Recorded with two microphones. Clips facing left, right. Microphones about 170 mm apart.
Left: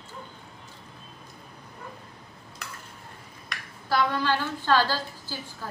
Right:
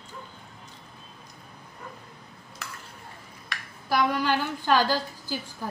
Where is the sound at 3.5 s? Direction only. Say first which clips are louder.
Right 1 dB; centre (ahead or behind).